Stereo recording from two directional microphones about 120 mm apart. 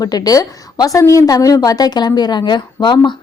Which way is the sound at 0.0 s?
30° left (ahead or behind).